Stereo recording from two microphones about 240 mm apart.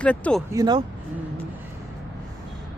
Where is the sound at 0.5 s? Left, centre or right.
Centre.